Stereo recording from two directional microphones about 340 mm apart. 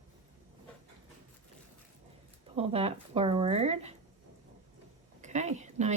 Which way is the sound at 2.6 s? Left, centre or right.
Centre.